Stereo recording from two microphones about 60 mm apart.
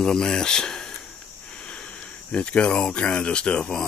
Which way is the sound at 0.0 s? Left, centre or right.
Centre.